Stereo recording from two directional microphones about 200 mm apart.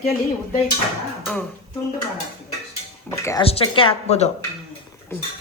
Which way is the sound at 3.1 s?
15° left (ahead or behind).